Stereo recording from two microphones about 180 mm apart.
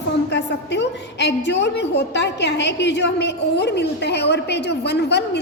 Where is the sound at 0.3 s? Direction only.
75° left (ahead or behind).